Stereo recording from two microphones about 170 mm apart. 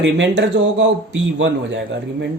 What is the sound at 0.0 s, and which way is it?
Speech, 90° right.